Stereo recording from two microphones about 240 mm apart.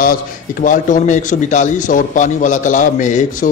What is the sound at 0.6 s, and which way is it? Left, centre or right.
A man's voice, left.